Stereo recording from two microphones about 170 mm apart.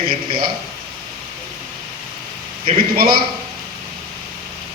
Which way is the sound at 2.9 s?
60° right (ahead or behind).